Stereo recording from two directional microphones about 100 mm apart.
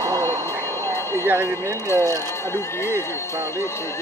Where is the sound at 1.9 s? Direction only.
25° left (ahead or behind).